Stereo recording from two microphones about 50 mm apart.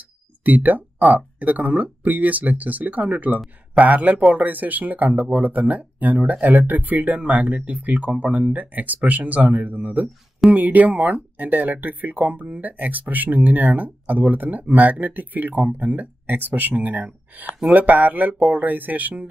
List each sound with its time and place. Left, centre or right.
0.4 s speech: right